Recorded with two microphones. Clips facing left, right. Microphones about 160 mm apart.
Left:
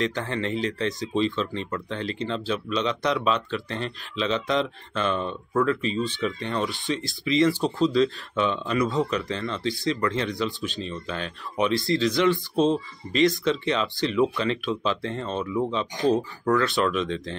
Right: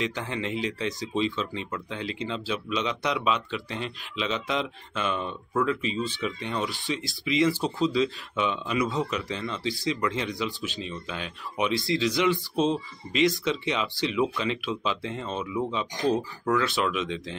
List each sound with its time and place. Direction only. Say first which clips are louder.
0.0 s speech: left 3 dB; 10° right (ahead or behind)
11.8 s speech: left 3 dB; 20° right (ahead or behind)
12.1 s speech: left 3 dB; 10° right (ahead or behind)